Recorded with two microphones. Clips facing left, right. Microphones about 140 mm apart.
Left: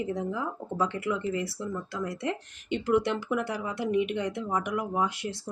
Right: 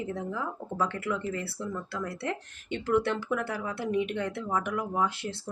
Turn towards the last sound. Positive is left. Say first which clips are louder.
# even
turn(degrees=15)  # may be behind; listen again after turning